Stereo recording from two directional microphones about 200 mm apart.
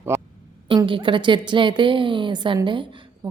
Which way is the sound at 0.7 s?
25° right (ahead or behind).